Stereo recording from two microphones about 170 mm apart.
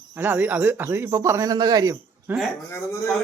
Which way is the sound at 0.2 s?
10° right (ahead or behind).